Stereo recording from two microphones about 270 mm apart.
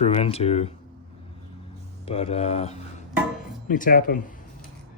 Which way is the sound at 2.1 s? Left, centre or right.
Left.